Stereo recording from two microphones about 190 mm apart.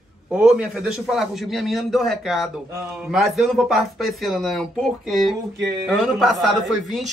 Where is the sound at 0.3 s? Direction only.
5° right (ahead or behind).